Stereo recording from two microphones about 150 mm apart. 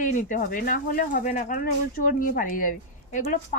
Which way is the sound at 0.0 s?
60° left (ahead or behind).